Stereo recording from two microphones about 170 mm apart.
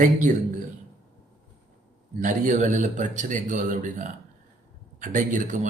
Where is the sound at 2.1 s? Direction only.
50° right (ahead or behind).